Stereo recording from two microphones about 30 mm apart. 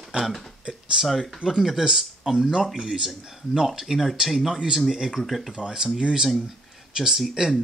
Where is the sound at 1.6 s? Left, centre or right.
Centre.